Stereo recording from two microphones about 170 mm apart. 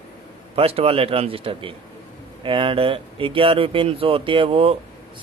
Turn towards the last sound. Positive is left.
turn(degrees=-35)  # may be behind; listen again after turning